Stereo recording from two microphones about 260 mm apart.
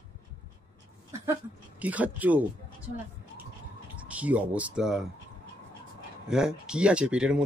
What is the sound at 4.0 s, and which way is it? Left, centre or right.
Speech, centre.